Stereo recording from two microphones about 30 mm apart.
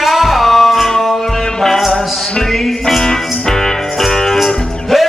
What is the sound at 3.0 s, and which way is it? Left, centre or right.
Music, centre.